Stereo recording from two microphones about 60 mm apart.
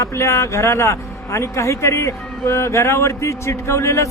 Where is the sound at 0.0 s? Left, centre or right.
Left.